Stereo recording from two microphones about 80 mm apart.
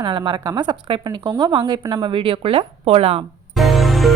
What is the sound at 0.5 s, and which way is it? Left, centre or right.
A woman's voice, right.